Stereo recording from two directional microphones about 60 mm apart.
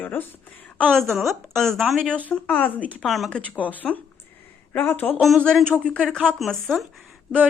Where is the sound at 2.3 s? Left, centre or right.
Left.